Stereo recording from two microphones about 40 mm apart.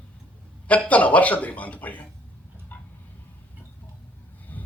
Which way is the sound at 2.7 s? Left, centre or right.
Left.